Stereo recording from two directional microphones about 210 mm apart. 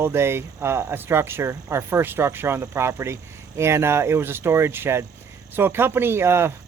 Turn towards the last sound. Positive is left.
turn(degrees=-10)  # may be behind; listen again after turning